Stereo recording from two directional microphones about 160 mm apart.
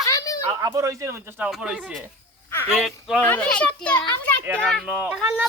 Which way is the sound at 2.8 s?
Centre (ahead or behind).